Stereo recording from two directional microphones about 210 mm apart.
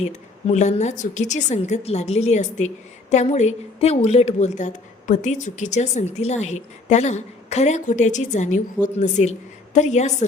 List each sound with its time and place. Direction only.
0.0 s a woman's voice: 30° left (ahead or behind)